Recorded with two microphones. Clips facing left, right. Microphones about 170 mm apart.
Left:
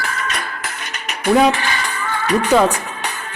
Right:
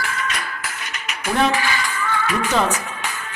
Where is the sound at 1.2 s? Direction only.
35° left (ahead or behind).